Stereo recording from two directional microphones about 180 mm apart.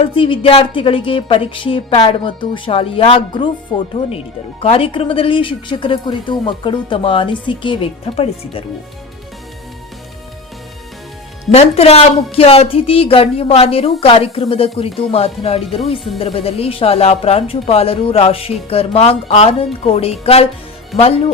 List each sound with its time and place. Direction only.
0.0 s a woman's voice: 30° left (ahead or behind)
4.6 s a woman's voice: 30° left (ahead or behind)
11.5 s speech: 35° left (ahead or behind)